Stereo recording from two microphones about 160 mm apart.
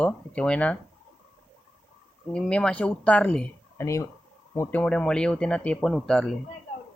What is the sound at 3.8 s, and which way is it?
Speech, 20° left (ahead or behind).